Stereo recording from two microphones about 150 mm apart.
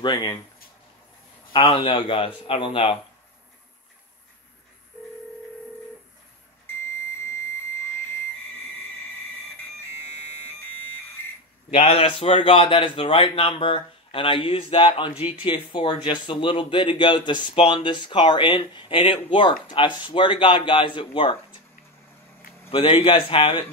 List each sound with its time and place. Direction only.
0.0 s a man's voice: 30° left (ahead or behind)
1.5 s a man's voice: 35° left (ahead or behind)
11.7 s a man's voice: 45° left (ahead or behind)
22.7 s a man's voice: 35° left (ahead or behind)